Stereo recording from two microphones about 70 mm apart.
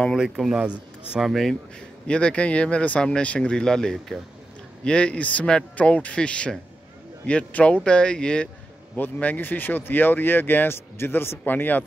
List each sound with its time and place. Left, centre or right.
0.2 s speech: centre
1.3 s speech: centre
8.9 s speech: left